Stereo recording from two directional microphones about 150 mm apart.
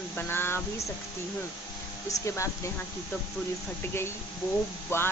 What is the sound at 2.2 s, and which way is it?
Speech, 20° left (ahead or behind).